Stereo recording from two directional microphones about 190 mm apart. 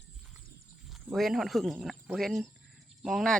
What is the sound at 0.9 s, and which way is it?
Speech, centre (ahead or behind).